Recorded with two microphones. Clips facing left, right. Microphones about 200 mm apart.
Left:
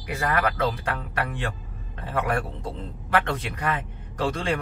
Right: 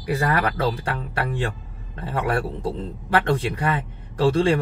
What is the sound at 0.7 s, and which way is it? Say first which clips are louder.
A man's voice: right 2 dB; 30° right (ahead or behind).